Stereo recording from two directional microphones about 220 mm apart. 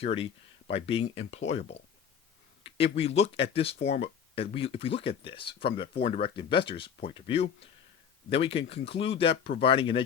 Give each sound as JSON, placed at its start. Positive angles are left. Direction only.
{"t": 0.0, "sound": "speech", "side_deg": 25}